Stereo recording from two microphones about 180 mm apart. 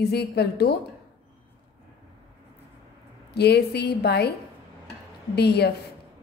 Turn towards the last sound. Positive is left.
turn(degrees=65)  # may be behind; listen again after turning